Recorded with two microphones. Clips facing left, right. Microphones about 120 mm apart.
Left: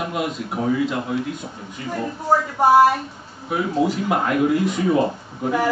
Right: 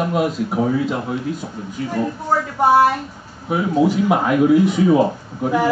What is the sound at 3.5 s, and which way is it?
Speech, 5° right (ahead or behind).